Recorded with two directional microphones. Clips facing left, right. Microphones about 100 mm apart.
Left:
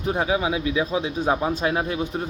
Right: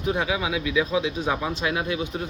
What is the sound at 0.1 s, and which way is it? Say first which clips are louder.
Speech: left 2 dB; 35° left (ahead or behind).